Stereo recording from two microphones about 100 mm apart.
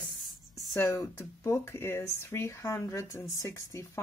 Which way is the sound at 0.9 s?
30° left (ahead or behind).